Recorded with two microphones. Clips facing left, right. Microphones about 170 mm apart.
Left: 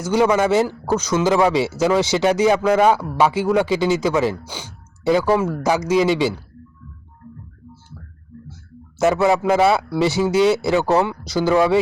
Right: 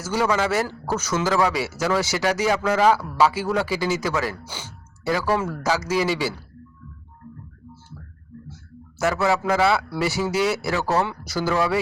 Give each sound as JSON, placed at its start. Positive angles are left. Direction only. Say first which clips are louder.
{"t": 0.0, "sound": "speech", "louder": "left 6 dB", "side_deg": 20}
{"t": 9.0, "sound": "speech", "louder": "left 5 dB", "side_deg": 20}